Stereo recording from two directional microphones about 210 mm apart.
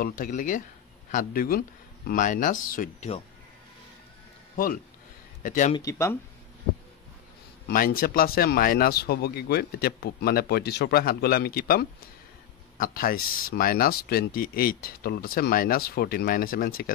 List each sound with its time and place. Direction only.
0.0 s speech: 40° left (ahead or behind)
5.4 s speech: 40° left (ahead or behind)
5.8 s speech: 15° left (ahead or behind)
7.6 s speech: 45° left (ahead or behind)